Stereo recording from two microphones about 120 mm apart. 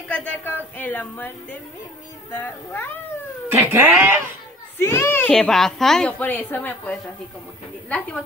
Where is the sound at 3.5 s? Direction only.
20° right (ahead or behind).